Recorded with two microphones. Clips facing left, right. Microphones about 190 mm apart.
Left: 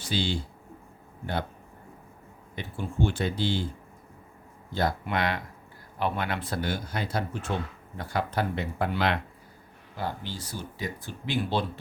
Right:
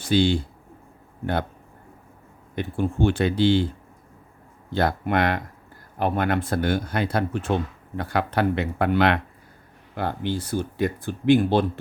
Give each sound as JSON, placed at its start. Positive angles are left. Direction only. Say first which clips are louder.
{"t": 0.0, "sound": "speech", "louder": "right 10 dB", "side_deg": -55}
{"t": 2.6, "sound": "speech", "louder": "right 7 dB", "side_deg": -55}
{"t": 4.7, "sound": "speech", "louder": "right 5 dB", "side_deg": -60}